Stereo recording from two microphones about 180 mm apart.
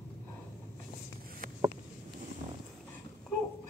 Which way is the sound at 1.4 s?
50° right (ahead or behind).